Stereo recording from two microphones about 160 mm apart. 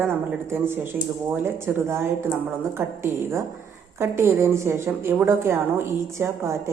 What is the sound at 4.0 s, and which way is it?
A woman's voice, 15° right (ahead or behind).